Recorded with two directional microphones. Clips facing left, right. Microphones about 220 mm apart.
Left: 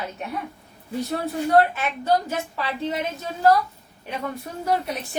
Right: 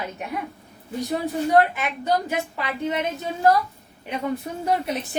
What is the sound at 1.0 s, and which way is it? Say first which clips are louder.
A woman's voice: right 1 dB; 15° right (ahead or behind).